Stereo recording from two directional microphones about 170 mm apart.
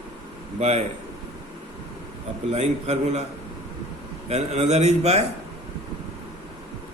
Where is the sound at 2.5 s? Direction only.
40° right (ahead or behind).